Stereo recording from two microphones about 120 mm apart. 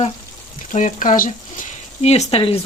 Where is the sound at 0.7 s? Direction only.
90° left; by 2.6 s 50° left (ahead or behind).